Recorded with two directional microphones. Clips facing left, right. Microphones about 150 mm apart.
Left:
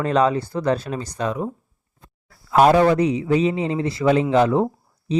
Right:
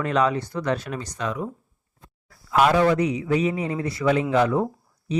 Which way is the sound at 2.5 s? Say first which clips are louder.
Left 4 dB; 40° left (ahead or behind).